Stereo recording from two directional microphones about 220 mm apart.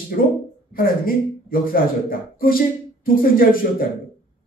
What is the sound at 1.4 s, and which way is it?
Speech, 40° left (ahead or behind).